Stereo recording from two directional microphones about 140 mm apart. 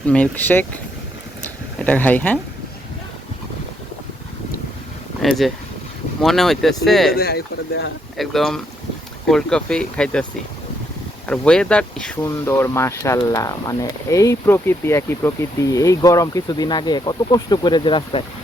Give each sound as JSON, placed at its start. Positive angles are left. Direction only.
{"t": 0.0, "sound": "speech", "side_deg": 10}
{"t": 1.8, "sound": "speech", "side_deg": 10}
{"t": 5.2, "sound": "speech", "side_deg": 0}
{"t": 7.1, "sound": "speech", "side_deg": 90}
{"t": 8.2, "sound": "speech", "side_deg": 0}
{"t": 11.3, "sound": "speech", "side_deg": 5}
{"t": 12.2, "sound": "speech", "side_deg": 20}